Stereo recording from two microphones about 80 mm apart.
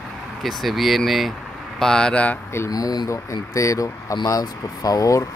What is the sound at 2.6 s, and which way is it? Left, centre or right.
Speech, left.